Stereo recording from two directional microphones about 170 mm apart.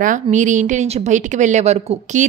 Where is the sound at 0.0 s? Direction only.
50° right (ahead or behind).